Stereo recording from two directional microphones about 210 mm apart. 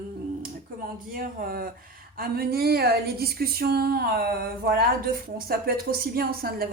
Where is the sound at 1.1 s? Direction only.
45° right (ahead or behind).